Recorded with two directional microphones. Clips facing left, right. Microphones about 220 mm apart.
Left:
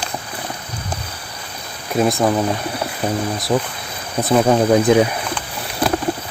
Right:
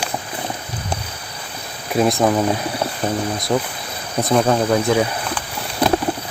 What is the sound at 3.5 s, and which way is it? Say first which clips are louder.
Speech: left 2 dB; centre (ahead or behind).